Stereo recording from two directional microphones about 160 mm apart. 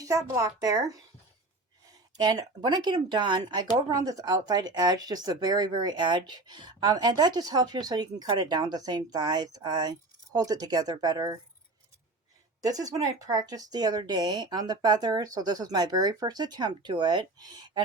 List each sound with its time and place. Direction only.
0.0 s speech: 20° right (ahead or behind)
1.9 s speech: 25° right (ahead or behind)
12.6 s speech: 25° right (ahead or behind)